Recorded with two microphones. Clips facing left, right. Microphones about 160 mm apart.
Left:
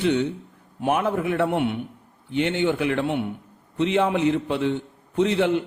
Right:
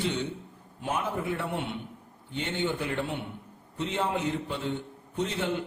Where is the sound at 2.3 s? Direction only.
75° left (ahead or behind).